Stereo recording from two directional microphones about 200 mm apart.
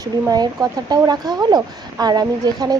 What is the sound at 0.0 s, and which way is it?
Speech, 20° right (ahead or behind).